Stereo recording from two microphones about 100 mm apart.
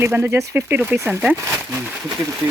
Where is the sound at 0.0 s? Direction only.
25° right (ahead or behind).